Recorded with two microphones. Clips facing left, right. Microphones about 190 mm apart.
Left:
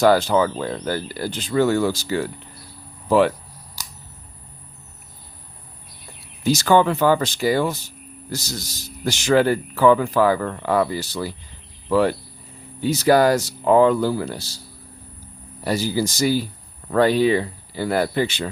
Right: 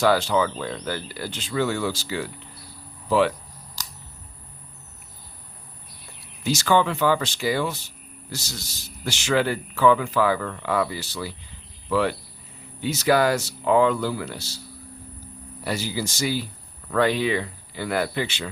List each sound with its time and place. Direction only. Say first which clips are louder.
0.0 s speech: left 4 dB; 45° left (ahead or behind)
6.4 s speech: left 4 dB; 40° left (ahead or behind)
15.6 s speech: left 6 dB; 35° left (ahead or behind)